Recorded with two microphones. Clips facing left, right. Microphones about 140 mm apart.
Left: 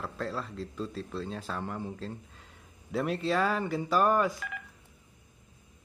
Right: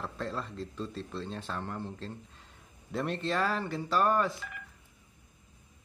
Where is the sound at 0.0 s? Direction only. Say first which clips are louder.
Left 1 dB; centre (ahead or behind).